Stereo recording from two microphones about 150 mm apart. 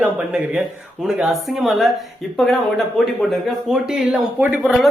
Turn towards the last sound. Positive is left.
turn(degrees=-5)  # may be behind; listen again after turning